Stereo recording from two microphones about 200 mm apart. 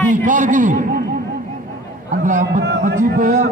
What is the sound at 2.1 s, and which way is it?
A man's voice, 40° right (ahead or behind).